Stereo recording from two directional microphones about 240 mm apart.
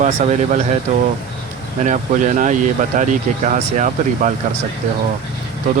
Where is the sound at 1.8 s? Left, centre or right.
Right.